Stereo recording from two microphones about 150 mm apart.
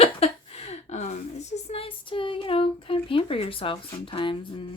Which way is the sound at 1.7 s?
40° left (ahead or behind).